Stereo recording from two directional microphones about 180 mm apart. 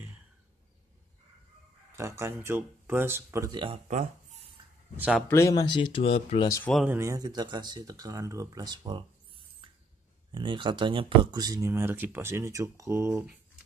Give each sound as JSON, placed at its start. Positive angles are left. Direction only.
{"t": 1.9, "sound": "speech", "side_deg": -15}
{"t": 3.9, "sound": "a sound", "side_deg": -40}
{"t": 4.9, "sound": "speech", "side_deg": -5}
{"t": 5.3, "sound": "speech", "side_deg": 20}
{"t": 6.4, "sound": "speech", "side_deg": 15}
{"t": 6.7, "sound": "speech", "side_deg": -5}
{"t": 10.3, "sound": "speech", "side_deg": -25}